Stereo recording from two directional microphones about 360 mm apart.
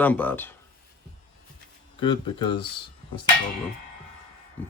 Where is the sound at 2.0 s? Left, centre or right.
Centre.